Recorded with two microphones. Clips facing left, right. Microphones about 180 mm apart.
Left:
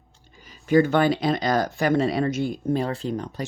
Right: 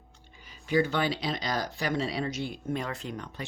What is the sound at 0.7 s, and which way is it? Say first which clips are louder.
Speech: left 8 dB; 50° left (ahead or behind).